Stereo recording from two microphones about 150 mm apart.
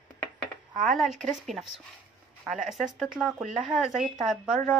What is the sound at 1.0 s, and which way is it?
Speech, centre (ahead or behind).